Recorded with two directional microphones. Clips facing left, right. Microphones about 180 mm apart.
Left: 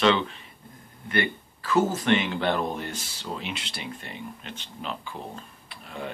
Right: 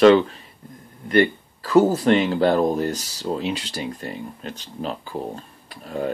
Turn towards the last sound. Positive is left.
turn(degrees=-40)  # may be behind; listen again after turning